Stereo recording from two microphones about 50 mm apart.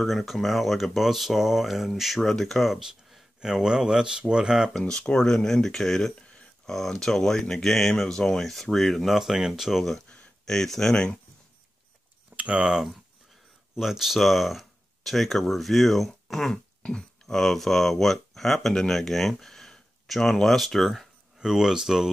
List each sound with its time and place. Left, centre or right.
0.0 s speech: centre
2.8 s a sound: centre
3.4 s speech: centre
4.7 s speech: centre
10.4 s speech: centre
12.4 s speech: right
12.6 s speech: centre
21.4 s speech: centre